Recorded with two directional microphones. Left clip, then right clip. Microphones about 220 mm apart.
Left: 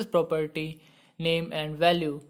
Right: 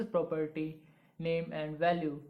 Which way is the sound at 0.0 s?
50° left (ahead or behind).